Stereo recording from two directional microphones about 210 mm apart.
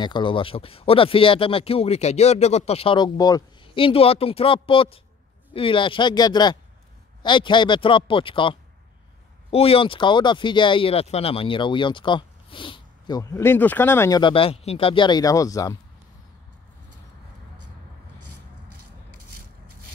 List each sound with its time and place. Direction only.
0.0 s speech: 20° left (ahead or behind)
18.2 s music: 90° right